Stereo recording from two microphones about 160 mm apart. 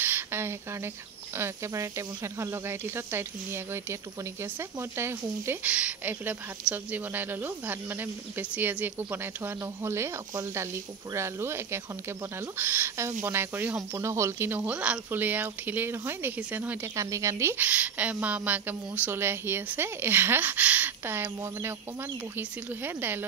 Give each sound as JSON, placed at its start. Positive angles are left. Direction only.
{"t": 0.0, "sound": "speech", "side_deg": -15}